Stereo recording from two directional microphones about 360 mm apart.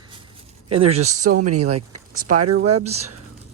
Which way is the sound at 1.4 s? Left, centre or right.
Right.